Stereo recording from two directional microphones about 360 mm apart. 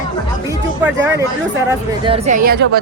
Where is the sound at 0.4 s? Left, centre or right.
Centre.